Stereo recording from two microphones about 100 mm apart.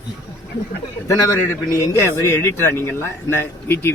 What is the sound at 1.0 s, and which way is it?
A man's voice, 30° left (ahead or behind).